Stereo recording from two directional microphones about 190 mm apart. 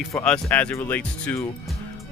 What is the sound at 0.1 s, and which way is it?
Speech, 10° left (ahead or behind).